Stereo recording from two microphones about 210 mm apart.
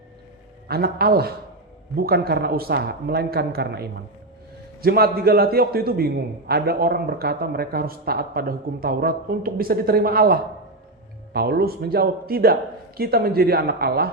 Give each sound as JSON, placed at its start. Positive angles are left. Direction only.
{"t": 0.7, "sound": "speech", "side_deg": -45}